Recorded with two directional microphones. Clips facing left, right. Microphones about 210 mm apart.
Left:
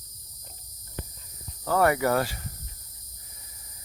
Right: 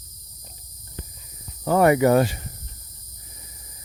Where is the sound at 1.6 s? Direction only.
20° right (ahead or behind).